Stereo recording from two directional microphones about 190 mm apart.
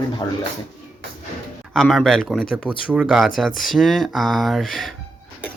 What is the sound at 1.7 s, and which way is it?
Speech, centre (ahead or behind).